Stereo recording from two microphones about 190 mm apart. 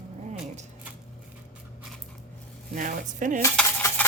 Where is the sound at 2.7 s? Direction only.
45° right (ahead or behind).